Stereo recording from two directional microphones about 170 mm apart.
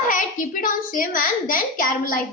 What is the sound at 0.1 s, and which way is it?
A child's voice, 55° left (ahead or behind).